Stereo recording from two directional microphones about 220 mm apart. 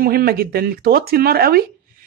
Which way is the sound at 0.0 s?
40° right (ahead or behind).